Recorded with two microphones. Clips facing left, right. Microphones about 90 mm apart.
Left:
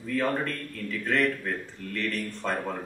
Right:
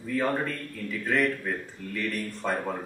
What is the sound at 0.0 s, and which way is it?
A man's voice, 5° right (ahead or behind).